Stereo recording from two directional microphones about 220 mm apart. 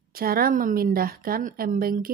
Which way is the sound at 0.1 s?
40° right (ahead or behind).